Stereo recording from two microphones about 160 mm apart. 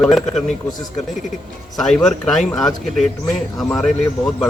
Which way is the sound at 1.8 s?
5° left (ahead or behind).